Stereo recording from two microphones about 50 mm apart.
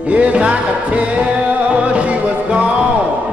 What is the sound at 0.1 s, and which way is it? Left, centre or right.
Music, right.